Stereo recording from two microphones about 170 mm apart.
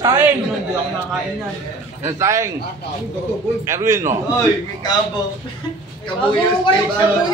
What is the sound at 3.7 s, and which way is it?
Speech, 15° right (ahead or behind).